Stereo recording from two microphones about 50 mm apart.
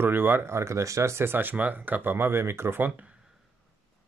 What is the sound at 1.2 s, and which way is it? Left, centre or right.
Speech, right.